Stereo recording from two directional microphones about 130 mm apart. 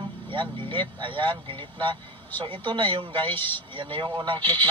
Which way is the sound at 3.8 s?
35° right (ahead or behind).